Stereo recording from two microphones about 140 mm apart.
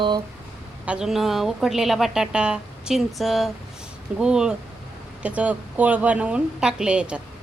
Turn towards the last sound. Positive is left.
turn(degrees=-5)  # may be behind; listen again after turning